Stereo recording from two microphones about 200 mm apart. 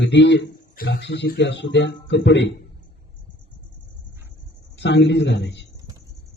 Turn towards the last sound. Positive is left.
turn(degrees=60)  # may be behind; listen again after turning